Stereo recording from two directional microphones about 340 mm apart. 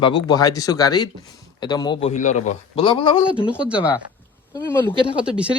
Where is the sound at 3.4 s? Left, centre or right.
Centre.